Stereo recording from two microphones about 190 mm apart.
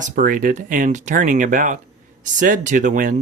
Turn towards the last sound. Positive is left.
turn(degrees=-45)  # may be behind; listen again after turning